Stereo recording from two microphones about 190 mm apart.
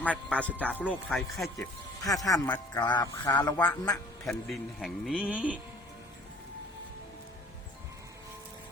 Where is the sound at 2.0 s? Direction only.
20° left (ahead or behind).